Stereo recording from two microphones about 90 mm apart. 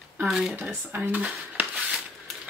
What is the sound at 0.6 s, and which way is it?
Speech, 20° right (ahead or behind).